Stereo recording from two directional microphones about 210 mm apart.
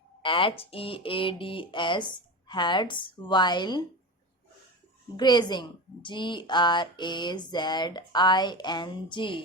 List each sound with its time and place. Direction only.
0.2 s a woman's voice: 25° left (ahead or behind)
5.1 s a woman's voice: 20° left (ahead or behind)